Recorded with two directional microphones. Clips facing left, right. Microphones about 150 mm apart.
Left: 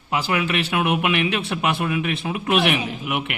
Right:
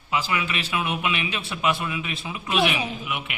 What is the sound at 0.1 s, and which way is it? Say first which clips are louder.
A man's voice: left 4 dB; 55° left (ahead or behind).